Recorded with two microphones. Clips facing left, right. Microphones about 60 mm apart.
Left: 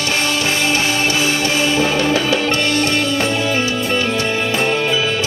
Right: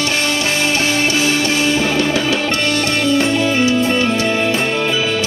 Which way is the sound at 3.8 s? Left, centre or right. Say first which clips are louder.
Right 3 dB; right.